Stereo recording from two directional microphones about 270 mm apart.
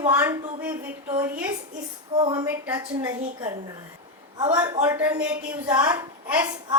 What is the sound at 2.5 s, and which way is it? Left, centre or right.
A woman's voice, centre.